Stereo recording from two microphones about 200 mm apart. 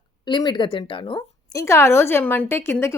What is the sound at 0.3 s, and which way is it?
A woman's voice, 25° left (ahead or behind).